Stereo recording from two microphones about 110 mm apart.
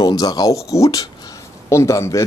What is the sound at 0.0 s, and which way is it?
A man's voice, 35° left (ahead or behind).